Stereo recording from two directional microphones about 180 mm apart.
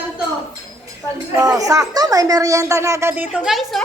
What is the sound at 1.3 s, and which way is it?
A woman's voice, 20° right (ahead or behind).